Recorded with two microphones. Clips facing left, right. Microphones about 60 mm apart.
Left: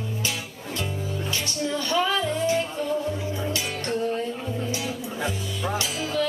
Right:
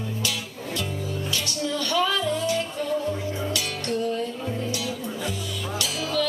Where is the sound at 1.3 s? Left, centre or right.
Left.